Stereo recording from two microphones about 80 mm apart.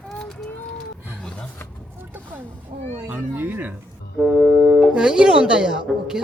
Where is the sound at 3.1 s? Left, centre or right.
Centre.